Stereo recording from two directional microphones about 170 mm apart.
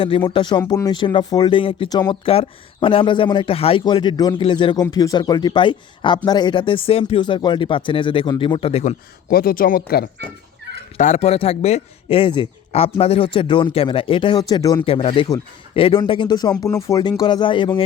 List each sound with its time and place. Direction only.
0.3 s speech: 30° left (ahead or behind)
9.3 s speech: 60° left (ahead or behind)
10.9 s speech: 45° left (ahead or behind); by 17.8 s 30° left (ahead or behind)